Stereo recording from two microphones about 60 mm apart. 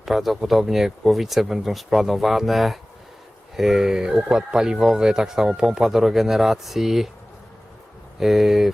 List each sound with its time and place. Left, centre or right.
0.0 s speech: centre
8.2 s speech: centre